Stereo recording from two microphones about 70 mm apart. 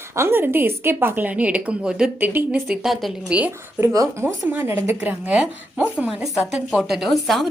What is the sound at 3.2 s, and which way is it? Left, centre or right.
Speech, centre.